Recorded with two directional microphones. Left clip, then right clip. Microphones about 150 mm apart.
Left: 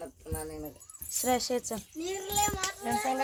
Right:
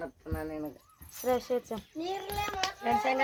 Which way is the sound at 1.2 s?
60° left (ahead or behind).